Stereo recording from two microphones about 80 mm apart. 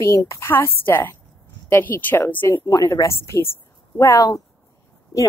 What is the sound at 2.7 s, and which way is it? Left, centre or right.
Speech, left.